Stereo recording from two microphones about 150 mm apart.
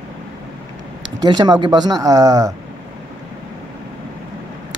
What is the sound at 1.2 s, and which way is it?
Speech, 25° right (ahead or behind).